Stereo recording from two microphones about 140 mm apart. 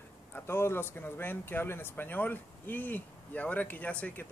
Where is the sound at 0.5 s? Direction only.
15° left (ahead or behind).